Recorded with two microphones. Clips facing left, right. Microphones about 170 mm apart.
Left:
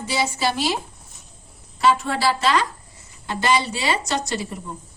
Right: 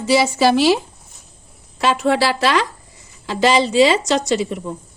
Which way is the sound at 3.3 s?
90° right.